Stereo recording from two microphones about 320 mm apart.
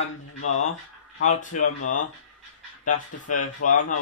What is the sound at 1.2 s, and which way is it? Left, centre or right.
Speech, left.